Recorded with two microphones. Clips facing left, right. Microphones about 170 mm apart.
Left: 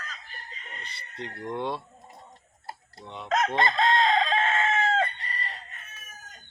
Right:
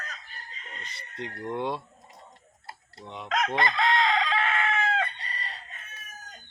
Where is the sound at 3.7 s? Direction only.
45° left (ahead or behind).